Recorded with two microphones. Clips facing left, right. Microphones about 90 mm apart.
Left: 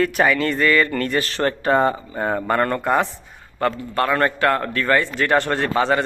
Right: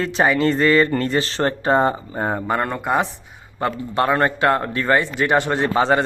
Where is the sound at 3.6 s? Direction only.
20° right (ahead or behind).